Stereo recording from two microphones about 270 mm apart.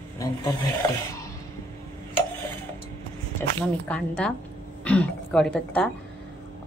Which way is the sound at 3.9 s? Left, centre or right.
Centre.